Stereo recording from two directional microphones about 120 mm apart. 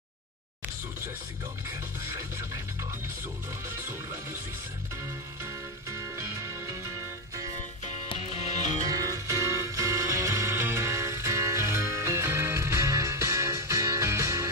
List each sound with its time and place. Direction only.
2.1 s music: 25° right (ahead or behind)
5.4 s music: 25° right (ahead or behind)
8.8 s music: 30° right (ahead or behind)